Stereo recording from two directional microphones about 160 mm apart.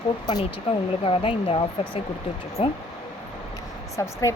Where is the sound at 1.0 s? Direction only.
35° left (ahead or behind).